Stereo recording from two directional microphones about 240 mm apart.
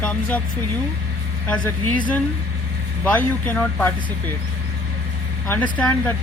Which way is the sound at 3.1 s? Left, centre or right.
Centre.